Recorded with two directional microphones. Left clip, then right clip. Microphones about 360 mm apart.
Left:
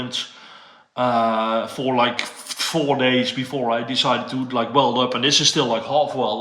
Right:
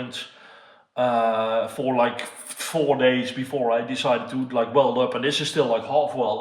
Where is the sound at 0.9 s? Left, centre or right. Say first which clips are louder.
Left 2 dB; centre.